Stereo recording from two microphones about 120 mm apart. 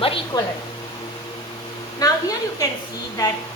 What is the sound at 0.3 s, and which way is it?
Speech, 35° left (ahead or behind).